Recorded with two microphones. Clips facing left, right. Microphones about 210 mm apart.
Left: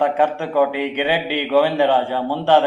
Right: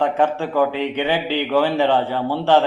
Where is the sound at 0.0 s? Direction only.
15° left (ahead or behind).